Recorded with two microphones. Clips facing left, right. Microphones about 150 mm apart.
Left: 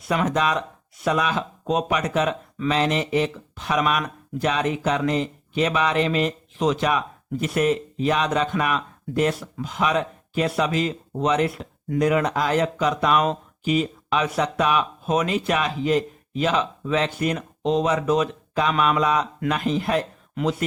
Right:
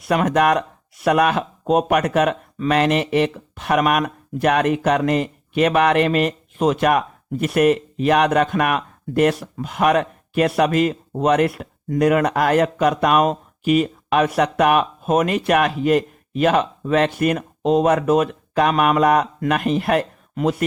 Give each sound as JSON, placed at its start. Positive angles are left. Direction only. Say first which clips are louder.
{"t": 0.0, "sound": "speech", "louder": "right 5 dB", "side_deg": -65}